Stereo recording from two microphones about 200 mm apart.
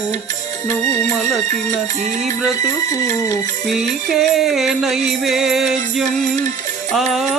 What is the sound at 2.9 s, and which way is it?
Music, 15° left (ahead or behind).